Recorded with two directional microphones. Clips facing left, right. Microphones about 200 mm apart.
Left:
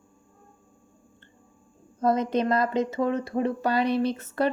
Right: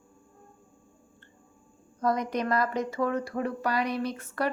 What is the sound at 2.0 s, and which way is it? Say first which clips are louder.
Speech: left 4 dB; 25° left (ahead or behind).